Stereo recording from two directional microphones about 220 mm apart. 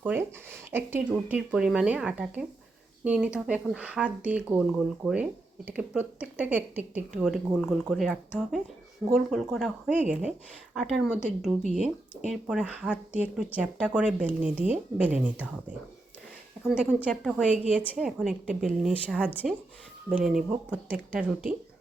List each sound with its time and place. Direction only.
0.0 s speech: 10° right (ahead or behind)
16.6 s speech: 5° right (ahead or behind)
17.4 s a woman's voice: 35° right (ahead or behind)
17.9 s speech: 5° right (ahead or behind)